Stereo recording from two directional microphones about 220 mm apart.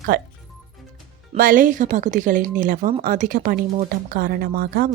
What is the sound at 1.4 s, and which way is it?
A woman's voice, 40° right (ahead or behind).